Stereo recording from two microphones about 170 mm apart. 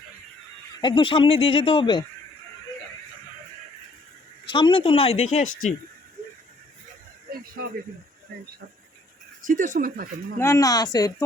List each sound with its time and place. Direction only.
0.8 s speech: 30° left (ahead or behind)
4.4 s speech: 30° left (ahead or behind)
9.5 s speech: 50° right (ahead or behind)
10.3 s speech: 15° left (ahead or behind)